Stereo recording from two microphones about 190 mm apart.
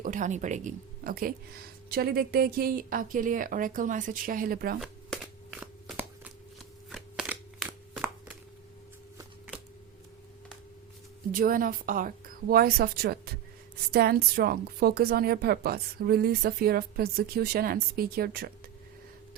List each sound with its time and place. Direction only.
0.0 s a woman's voice: 45° right (ahead or behind)
4.8 s shuffling cards: centre (ahead or behind)
6.9 s a sound: centre (ahead or behind)
11.3 s a woman's voice: 50° right (ahead or behind)